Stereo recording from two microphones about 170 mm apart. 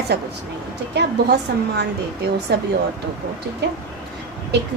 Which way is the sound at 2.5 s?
75° right (ahead or behind).